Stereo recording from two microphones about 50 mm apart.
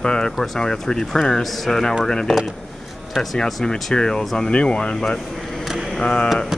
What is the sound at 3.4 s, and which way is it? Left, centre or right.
Speech, centre.